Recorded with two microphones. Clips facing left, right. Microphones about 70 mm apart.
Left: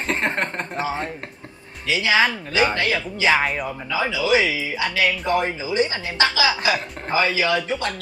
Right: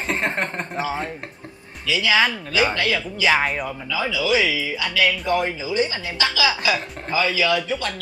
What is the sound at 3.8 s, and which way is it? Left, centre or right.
Speech, left.